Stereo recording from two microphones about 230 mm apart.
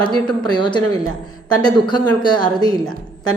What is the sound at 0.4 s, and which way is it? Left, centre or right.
A woman's voice, centre.